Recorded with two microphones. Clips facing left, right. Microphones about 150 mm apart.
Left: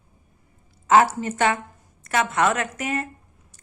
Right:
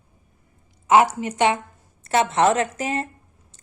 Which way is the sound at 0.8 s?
15° right (ahead or behind).